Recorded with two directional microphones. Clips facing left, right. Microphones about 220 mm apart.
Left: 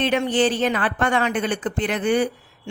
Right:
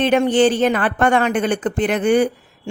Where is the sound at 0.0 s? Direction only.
50° right (ahead or behind).